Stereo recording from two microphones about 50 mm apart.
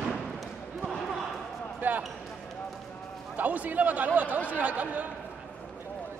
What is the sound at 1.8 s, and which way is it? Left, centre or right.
Basketball bounce, right.